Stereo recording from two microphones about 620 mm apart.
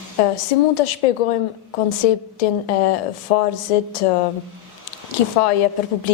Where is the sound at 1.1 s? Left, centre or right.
Left.